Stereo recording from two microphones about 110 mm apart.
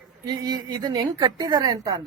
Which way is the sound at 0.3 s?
35° right (ahead or behind).